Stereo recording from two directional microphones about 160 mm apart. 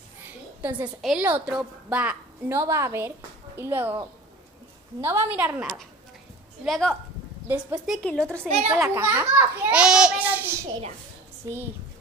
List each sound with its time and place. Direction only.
0.6 s a woman's voice: 10° right (ahead or behind)
5.0 s a woman's voice: 10° right (ahead or behind); by 8.5 s 10° left (ahead or behind)
8.7 s a child's voice: 15° right (ahead or behind)